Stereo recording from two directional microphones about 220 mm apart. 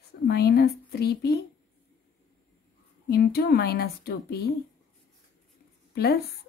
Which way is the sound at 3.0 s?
45° left (ahead or behind).